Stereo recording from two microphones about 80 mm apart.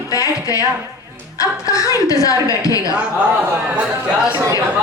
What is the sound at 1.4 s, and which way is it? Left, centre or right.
A woman's voice, left.